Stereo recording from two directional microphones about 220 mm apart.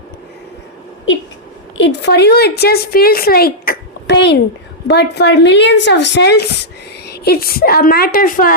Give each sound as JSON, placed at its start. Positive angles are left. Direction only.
{"t": 1.1, "sound": "a woman's voice", "side_deg": 60}